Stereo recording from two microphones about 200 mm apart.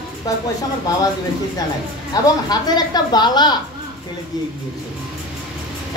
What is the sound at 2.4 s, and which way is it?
A man's voice, 20° left (ahead or behind).